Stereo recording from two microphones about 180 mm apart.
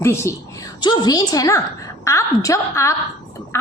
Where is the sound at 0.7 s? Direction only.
25° left (ahead or behind).